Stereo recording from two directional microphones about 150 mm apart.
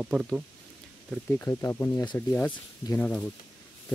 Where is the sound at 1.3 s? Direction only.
20° left (ahead or behind).